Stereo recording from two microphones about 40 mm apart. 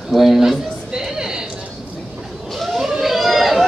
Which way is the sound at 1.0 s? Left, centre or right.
Centre.